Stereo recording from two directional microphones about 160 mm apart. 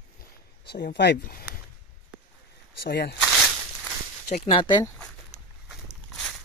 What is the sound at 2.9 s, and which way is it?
Speech, 90° left.